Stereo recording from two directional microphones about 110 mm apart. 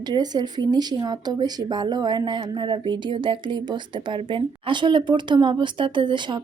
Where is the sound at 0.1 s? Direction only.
40° right (ahead or behind).